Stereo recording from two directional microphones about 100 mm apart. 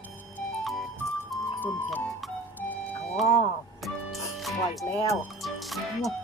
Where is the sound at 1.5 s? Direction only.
20° left (ahead or behind).